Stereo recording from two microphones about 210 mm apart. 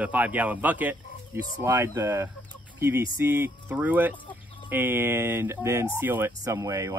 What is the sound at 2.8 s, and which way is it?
Chicken, 15° right (ahead or behind).